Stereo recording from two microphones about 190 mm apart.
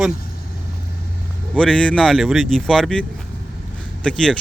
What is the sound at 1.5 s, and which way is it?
Speech, 5° left (ahead or behind).